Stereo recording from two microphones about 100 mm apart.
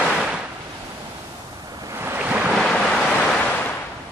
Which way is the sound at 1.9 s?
20° right (ahead or behind).